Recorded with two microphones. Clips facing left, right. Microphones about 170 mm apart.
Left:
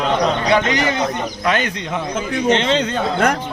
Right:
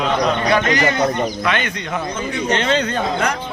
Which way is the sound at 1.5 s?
35° left (ahead or behind).